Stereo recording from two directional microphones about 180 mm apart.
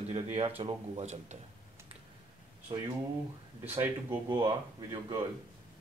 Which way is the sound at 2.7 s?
25° right (ahead or behind).